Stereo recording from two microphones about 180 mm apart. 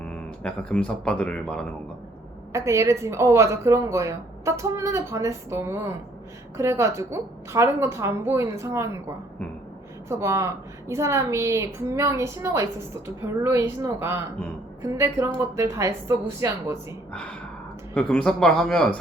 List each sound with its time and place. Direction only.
0.0 s speech: 5° left (ahead or behind)
2.5 s speech: 15° right (ahead or behind)
17.1 s speech: 5° left (ahead or behind)